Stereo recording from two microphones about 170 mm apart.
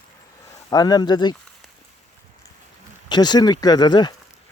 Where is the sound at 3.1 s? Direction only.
25° left (ahead or behind).